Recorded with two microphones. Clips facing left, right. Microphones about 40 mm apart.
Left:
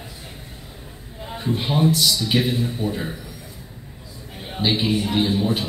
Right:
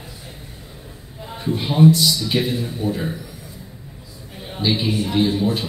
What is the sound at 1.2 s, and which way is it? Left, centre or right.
A man's voice, centre.